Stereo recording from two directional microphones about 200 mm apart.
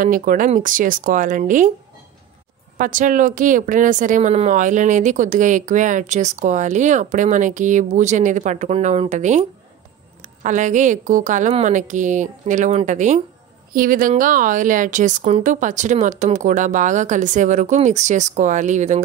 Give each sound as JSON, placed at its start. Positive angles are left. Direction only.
{"t": 0.0, "sound": "speech", "side_deg": -40}
{"t": 2.8, "sound": "speech", "side_deg": -40}